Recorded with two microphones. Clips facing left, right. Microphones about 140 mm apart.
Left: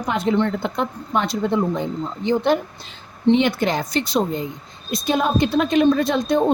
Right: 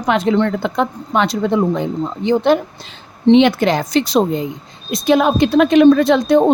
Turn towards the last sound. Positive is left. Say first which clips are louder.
# right 7 dB
turn(degrees=-85)